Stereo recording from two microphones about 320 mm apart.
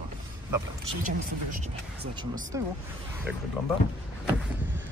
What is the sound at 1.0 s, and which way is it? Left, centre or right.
Speech, right.